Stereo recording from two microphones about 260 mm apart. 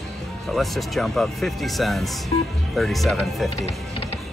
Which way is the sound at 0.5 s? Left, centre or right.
Centre.